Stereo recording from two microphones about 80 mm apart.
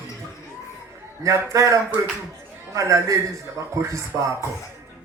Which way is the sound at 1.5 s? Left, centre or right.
Right.